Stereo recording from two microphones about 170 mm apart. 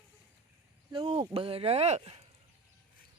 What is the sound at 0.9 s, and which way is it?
Speech, 35° right (ahead or behind).